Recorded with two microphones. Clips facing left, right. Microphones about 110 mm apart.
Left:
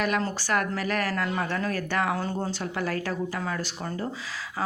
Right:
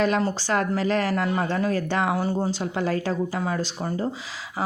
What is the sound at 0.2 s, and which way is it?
Speech, 20° right (ahead or behind).